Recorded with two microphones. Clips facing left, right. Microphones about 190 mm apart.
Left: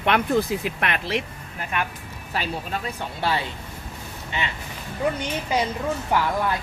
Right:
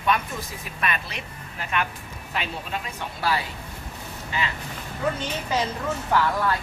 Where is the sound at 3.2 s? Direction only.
25° left (ahead or behind).